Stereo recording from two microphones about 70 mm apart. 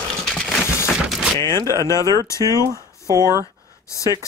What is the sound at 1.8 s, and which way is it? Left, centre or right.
Speech, left.